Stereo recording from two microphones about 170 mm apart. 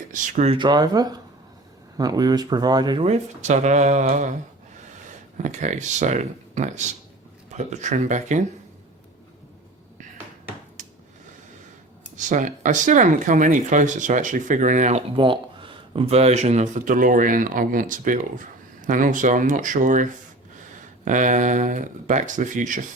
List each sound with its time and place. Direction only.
0.1 s speech: 50° right (ahead or behind)
0.5 s speech: 25° right (ahead or behind)
3.1 s speech: 45° right (ahead or behind)
5.4 s speech: 45° right (ahead or behind)
12.1 s speech: 45° right (ahead or behind)